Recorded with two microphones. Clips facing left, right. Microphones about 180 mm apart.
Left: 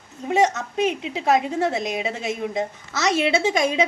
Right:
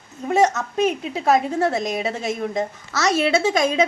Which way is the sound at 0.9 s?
40° right (ahead or behind).